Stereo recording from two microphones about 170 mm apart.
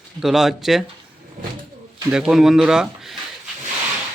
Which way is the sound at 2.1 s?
5° right (ahead or behind).